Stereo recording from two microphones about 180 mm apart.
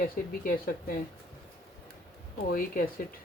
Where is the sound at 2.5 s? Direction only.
55° left (ahead or behind).